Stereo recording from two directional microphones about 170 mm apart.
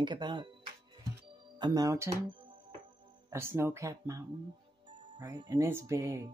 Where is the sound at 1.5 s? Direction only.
25° right (ahead or behind).